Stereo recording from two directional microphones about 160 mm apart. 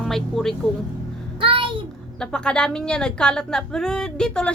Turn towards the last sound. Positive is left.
turn(degrees=5)  # may be behind; listen again after turning